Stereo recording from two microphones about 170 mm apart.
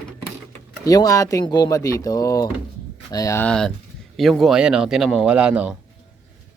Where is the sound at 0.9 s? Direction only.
20° left (ahead or behind).